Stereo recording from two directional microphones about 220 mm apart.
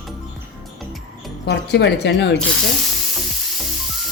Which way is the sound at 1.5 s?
50° left (ahead or behind).